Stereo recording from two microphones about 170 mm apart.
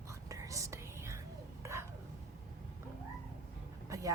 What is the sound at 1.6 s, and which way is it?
Hiccup, 15° right (ahead or behind).